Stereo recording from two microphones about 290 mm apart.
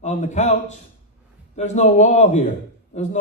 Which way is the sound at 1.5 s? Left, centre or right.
Left.